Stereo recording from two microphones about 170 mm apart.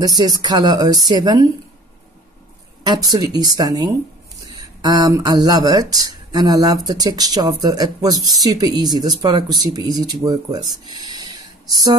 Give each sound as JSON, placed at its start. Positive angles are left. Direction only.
{"t": 0.0, "sound": "speech", "side_deg": -25}
{"t": 2.8, "sound": "speech", "side_deg": -25}